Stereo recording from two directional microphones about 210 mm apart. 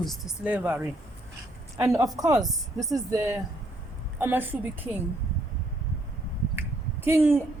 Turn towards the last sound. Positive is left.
turn(degrees=-10)  # may be behind; listen again after turning